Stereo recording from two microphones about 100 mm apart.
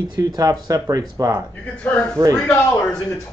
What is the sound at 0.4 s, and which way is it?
Speech, 35° right (ahead or behind).